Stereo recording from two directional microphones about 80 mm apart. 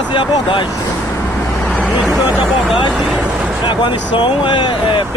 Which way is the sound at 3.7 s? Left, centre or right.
Left.